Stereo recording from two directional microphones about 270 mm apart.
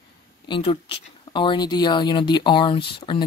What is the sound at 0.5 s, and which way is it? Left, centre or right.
Speech, left.